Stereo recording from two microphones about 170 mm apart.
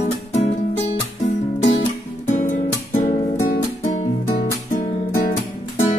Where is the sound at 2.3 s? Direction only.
45° left (ahead or behind).